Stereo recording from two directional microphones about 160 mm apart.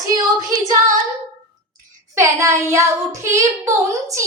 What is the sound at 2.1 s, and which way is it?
Child singing, 20° right (ahead or behind).